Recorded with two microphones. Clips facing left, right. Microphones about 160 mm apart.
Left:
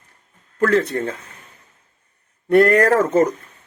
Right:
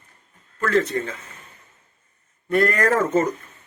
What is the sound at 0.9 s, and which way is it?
Speech, 60° left (ahead or behind).